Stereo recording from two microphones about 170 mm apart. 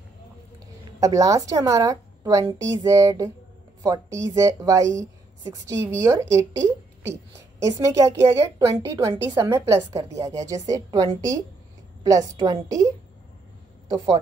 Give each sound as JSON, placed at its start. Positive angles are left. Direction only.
{"t": 0.9, "sound": "a woman's voice", "side_deg": -20}
{"t": 7.6, "sound": "a woman's voice", "side_deg": -20}